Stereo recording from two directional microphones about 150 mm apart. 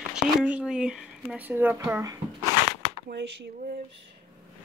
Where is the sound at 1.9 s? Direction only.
20° right (ahead or behind).